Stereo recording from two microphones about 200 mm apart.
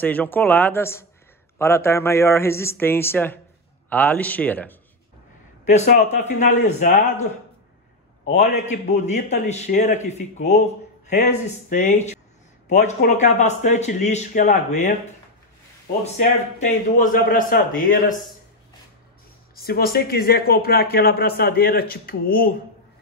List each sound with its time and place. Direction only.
0.0 s speech: 10° left (ahead or behind)
5.9 s speech: 40° left (ahead or behind)
8.3 s speech: 35° left (ahead or behind)
16.2 s speech: 40° left (ahead or behind)
19.5 s speech: 50° left (ahead or behind)